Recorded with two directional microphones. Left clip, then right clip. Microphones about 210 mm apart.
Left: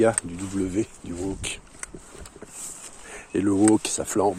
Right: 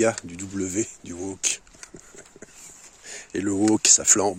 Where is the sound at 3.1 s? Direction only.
30° right (ahead or behind).